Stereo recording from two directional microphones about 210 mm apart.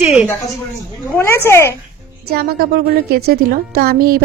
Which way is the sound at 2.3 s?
45° right (ahead or behind).